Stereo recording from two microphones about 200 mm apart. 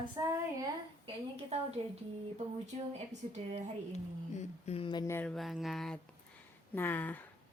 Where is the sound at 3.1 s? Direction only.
35° right (ahead or behind).